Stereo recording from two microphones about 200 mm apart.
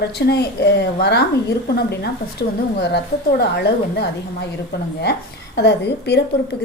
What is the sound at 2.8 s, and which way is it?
A woman's voice, 55° left (ahead or behind).